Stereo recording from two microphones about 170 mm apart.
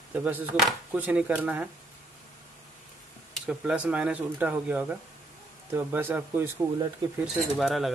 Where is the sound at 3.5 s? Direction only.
5° right (ahead or behind).